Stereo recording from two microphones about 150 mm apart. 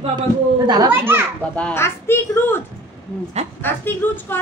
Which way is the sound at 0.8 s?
15° right (ahead or behind).